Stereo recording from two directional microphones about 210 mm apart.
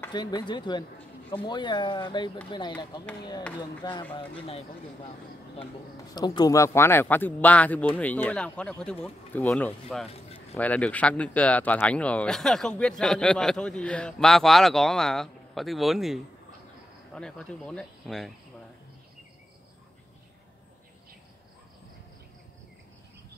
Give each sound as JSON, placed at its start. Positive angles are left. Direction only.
{"t": 0.1, "sound": "speech", "side_deg": 20}
{"t": 6.1, "sound": "speech", "side_deg": 20}
{"t": 10.0, "sound": "a sound", "side_deg": 30}
{"t": 10.5, "sound": "speech", "side_deg": 5}